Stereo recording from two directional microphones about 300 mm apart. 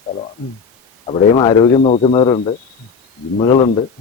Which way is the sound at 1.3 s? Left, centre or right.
Centre.